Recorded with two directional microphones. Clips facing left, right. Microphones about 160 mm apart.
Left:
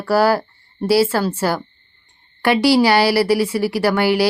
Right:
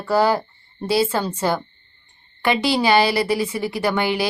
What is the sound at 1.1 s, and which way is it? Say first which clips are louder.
Speech: left 4 dB; 10° left (ahead or behind).